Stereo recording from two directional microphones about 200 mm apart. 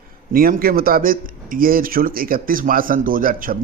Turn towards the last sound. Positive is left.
turn(degrees=-45)  # may be behind; listen again after turning